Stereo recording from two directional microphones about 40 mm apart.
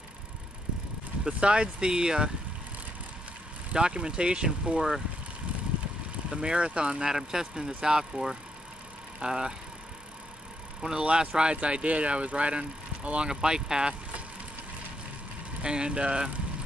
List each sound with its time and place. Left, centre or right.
1.4 s speech: right
3.7 s speech: right
6.3 s speech: right
7.1 s speech: centre
10.8 s speech: centre; by 13.3 s right
13.3 s speech: centre
15.6 s speech: right